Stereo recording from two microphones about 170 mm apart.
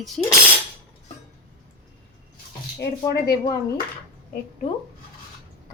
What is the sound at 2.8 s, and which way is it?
Speech, 75° left (ahead or behind).